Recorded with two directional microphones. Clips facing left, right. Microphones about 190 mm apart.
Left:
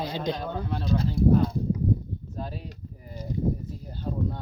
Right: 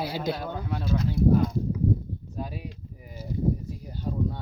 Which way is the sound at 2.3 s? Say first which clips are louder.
Right 1 dB; 10° right (ahead or behind).